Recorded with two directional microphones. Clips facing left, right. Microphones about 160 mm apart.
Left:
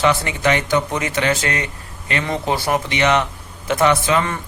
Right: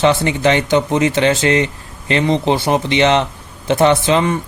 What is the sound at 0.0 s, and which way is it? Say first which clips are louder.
Speech: right 4 dB; 25° right (ahead or behind).